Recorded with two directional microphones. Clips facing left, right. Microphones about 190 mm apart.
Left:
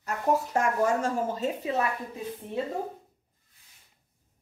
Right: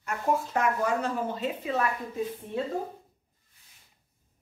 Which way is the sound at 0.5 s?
45° left (ahead or behind).